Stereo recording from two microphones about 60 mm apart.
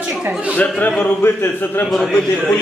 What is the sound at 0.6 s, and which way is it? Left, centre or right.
Speech, left.